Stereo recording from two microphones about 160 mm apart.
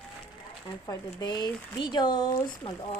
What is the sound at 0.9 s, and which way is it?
Speech, 30° left (ahead or behind).